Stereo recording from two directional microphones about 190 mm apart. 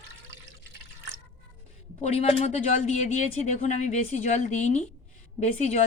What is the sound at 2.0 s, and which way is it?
A woman's voice, 35° left (ahead or behind).